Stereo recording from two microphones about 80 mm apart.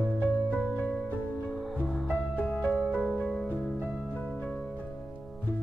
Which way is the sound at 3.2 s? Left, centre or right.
Centre.